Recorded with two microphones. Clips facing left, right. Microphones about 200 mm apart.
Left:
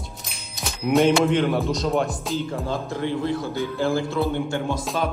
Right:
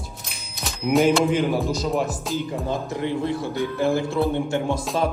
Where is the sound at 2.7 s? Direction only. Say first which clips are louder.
Right 1 dB; 20° right (ahead or behind).